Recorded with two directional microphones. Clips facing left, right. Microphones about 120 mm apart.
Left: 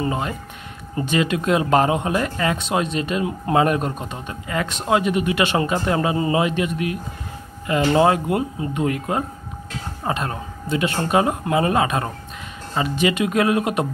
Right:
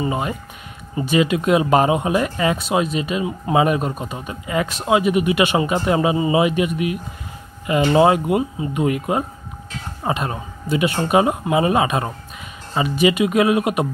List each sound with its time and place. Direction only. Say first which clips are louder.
0.0 s speech: right 1 dB; 10° right (ahead or behind)